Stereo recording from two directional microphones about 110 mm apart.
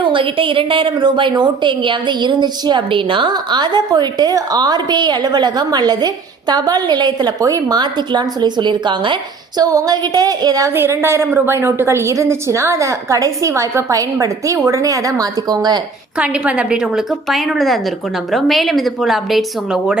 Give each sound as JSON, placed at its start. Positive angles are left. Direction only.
{"t": 0.0, "sound": "a woman's voice", "side_deg": -50}
{"t": 9.6, "sound": "a woman's voice", "side_deg": -35}
{"t": 10.7, "sound": "a woman's voice", "side_deg": -20}
{"t": 16.1, "sound": "speech", "side_deg": -10}